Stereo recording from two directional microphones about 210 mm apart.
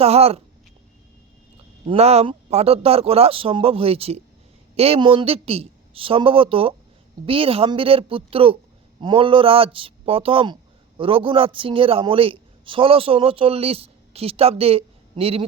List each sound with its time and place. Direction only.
0.0 s a man's voice: 30° right (ahead or behind)
1.9 s a man's voice: 30° right (ahead or behind)